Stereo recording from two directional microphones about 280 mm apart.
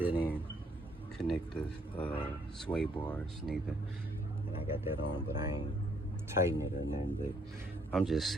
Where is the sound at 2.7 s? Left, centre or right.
Centre.